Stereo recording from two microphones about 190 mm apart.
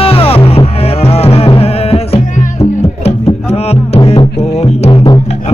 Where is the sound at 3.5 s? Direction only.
35° left (ahead or behind).